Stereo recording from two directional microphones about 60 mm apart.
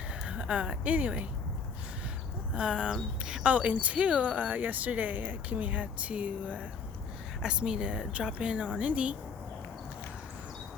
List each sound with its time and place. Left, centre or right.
0.3 s speech: centre
2.6 s speech: centre
3.4 s speech: right